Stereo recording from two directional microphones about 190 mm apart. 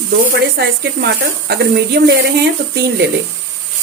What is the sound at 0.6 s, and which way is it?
Speech, 60° right (ahead or behind).